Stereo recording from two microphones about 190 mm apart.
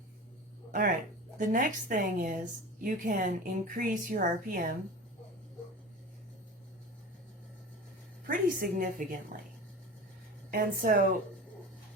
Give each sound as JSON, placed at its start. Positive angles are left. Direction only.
{"t": 0.7, "sound": "a woman's voice", "side_deg": -45}
{"t": 8.3, "sound": "a woman's voice", "side_deg": -45}
{"t": 10.5, "sound": "a woman's voice", "side_deg": -50}